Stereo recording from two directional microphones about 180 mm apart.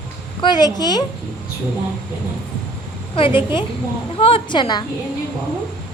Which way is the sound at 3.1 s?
30° left (ahead or behind).